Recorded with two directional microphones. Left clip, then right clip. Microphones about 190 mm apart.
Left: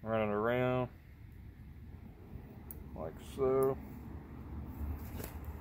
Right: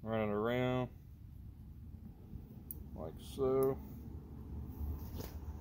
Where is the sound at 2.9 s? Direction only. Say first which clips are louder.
Left 3 dB; 15° left (ahead or behind).